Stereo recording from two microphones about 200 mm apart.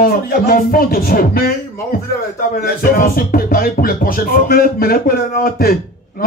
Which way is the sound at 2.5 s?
45° left (ahead or behind).